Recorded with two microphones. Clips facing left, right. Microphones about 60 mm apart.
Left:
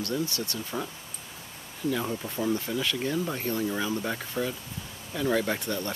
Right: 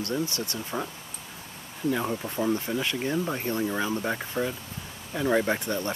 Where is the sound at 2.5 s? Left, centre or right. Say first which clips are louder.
Right 1 dB; right.